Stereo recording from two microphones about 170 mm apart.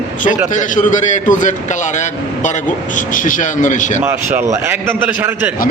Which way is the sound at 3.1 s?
50° left (ahead or behind).